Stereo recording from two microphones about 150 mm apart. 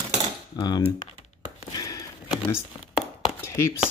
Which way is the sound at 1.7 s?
25° left (ahead or behind).